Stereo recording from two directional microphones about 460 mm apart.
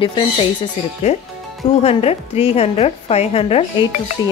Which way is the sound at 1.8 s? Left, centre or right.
Centre.